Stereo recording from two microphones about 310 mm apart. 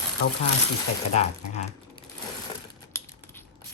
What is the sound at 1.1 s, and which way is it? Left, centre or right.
Speech, left.